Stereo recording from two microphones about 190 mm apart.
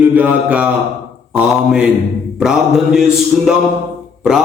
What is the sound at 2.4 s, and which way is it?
Speech, 5° right (ahead or behind).